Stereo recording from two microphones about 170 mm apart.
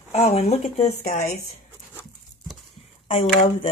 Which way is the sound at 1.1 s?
65° left (ahead or behind).